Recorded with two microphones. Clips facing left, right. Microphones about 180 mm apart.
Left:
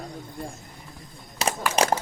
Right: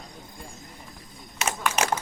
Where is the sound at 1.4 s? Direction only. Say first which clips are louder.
Left 3 dB; 35° left (ahead or behind).